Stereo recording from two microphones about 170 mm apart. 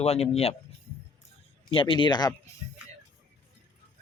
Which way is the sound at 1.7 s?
30° left (ahead or behind).